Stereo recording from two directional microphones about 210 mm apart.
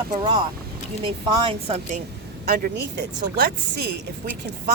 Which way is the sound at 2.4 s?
50° right (ahead or behind).